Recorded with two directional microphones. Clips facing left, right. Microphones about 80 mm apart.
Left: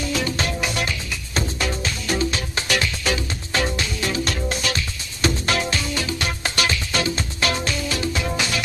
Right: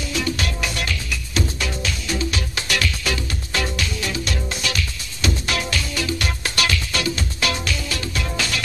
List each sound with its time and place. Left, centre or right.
0.4 s music: left
2.5 s music: left